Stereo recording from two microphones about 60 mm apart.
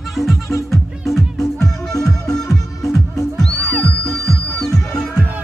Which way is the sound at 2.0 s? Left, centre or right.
Left.